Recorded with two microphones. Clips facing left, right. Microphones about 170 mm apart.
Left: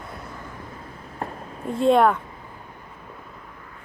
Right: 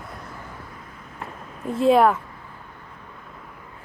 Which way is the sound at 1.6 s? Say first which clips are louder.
Right 1 dB; centre (ahead or behind).